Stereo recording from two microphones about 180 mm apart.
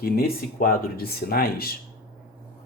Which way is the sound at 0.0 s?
55° left (ahead or behind).